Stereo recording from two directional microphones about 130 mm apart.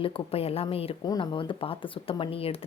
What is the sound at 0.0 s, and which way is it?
Speech, 45° left (ahead or behind).